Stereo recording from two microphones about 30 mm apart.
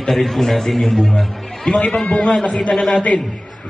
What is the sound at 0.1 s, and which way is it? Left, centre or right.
A man's voice, centre.